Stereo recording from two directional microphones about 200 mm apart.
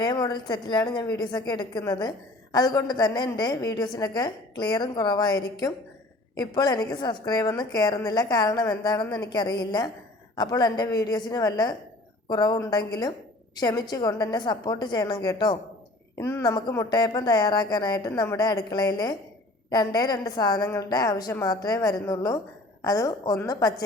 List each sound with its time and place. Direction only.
0.0 s a woman's voice: 20° left (ahead or behind)